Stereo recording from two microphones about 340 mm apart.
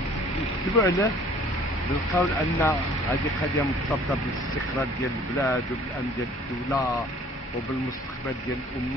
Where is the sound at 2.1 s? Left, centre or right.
Centre.